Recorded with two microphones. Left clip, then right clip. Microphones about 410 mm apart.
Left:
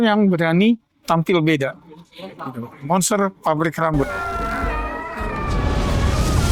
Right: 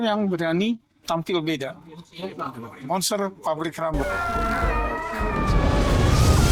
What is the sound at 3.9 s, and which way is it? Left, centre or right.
Cat, centre.